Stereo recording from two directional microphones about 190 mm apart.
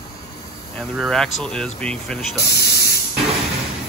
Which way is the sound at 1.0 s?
Centre (ahead or behind).